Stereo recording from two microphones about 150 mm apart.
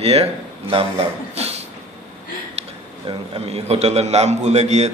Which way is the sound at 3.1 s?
40° right (ahead or behind).